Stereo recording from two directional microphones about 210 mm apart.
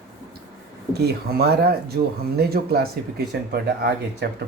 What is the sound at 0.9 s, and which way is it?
Speech, 50° right (ahead or behind).